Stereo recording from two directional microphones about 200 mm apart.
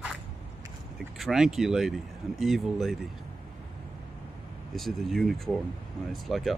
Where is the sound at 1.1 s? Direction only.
Centre (ahead or behind).